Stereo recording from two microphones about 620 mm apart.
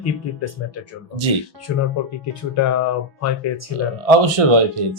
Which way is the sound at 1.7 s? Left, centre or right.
Left.